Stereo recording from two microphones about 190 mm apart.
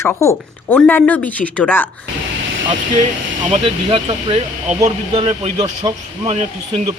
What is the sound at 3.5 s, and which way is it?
Speech, 30° right (ahead or behind).